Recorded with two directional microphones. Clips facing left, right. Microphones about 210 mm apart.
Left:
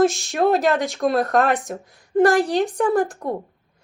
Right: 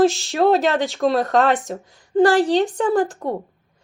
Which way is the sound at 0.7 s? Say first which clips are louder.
Right 2 dB; 15° left (ahead or behind).